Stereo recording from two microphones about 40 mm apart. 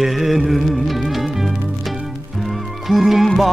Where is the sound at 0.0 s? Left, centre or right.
Centre.